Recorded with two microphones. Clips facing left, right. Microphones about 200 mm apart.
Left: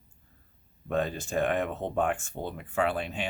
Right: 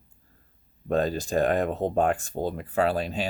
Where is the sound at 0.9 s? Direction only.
35° right (ahead or behind).